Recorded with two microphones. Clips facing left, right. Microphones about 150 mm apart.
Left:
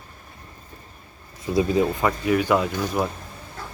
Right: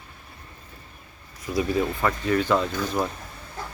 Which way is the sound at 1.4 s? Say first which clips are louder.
Left 4 dB; 25° left (ahead or behind).